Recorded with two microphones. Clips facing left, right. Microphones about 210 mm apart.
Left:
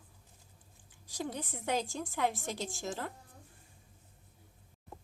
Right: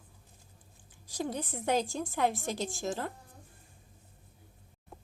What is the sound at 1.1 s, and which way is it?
A woman's voice, 40° right (ahead or behind).